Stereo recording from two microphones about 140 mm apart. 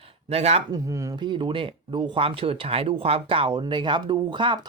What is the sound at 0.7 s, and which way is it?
Speech, 25° right (ahead or behind).